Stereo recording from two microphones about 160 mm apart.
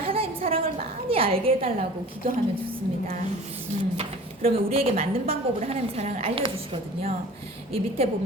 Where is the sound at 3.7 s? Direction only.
45° right (ahead or behind).